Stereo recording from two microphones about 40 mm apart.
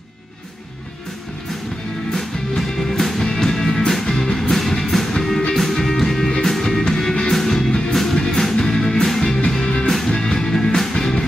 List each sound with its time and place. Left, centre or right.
2.1 s music: centre